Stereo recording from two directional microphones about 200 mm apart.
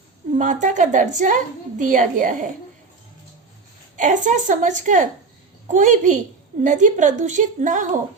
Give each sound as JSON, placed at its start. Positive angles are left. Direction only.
{"t": 0.3, "sound": "a woman's voice", "side_deg": -40}
{"t": 3.9, "sound": "a woman's voice", "side_deg": -40}